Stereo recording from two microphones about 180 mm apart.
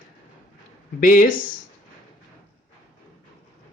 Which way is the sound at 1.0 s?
50° left (ahead or behind).